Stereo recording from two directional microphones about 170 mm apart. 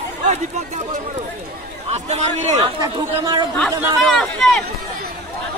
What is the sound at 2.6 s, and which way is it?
Speech, 25° right (ahead or behind).